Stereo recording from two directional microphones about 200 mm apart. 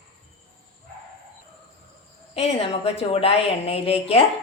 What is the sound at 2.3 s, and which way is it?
A woman's voice, 30° left (ahead or behind).